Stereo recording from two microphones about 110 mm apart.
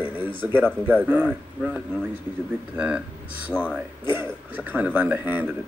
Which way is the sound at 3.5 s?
5° left (ahead or behind).